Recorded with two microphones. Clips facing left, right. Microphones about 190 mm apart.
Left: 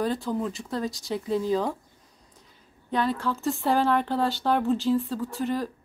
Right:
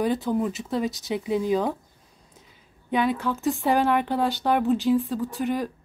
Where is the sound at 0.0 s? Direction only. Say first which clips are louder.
Right 3 dB; 15° right (ahead or behind).